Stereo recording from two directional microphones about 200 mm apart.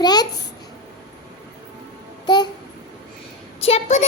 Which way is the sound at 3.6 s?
30° left (ahead or behind).